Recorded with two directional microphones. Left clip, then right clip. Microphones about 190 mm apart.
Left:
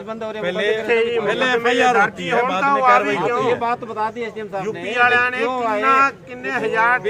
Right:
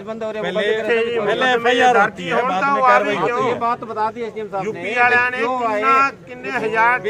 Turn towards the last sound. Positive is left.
turn(degrees=0)  # may be behind; listen again after turning